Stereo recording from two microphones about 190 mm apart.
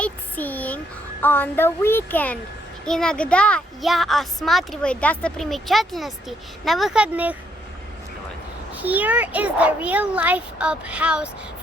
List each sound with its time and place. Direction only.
0.0 s speech: 10° left (ahead or behind); by 7.3 s 5° right (ahead or behind)
8.7 s a child's voice: 10° right (ahead or behind)